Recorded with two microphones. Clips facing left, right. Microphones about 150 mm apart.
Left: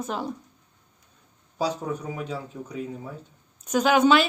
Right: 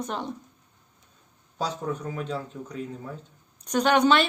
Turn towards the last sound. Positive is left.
turn(degrees=5)  # may be behind; listen again after turning